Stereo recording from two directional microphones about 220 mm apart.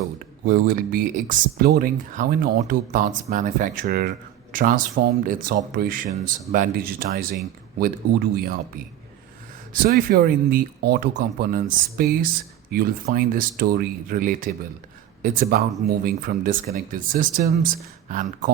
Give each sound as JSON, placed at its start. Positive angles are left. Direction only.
{"t": 0.4, "sound": "speech", "side_deg": -40}
{"t": 9.7, "sound": "speech", "side_deg": -40}